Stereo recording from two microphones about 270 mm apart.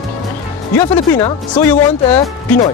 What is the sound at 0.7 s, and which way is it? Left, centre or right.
A man's voice, centre.